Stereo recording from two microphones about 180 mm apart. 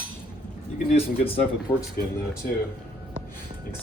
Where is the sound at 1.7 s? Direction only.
20° left (ahead or behind).